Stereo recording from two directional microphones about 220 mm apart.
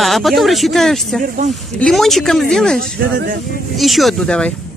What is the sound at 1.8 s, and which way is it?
Speech, centre (ahead or behind).